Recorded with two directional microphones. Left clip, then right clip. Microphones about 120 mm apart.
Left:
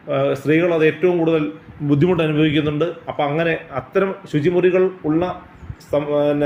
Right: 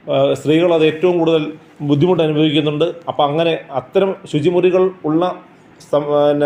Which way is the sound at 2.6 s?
10° right (ahead or behind).